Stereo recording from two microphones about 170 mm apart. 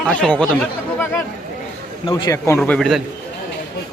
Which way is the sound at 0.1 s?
5° left (ahead or behind).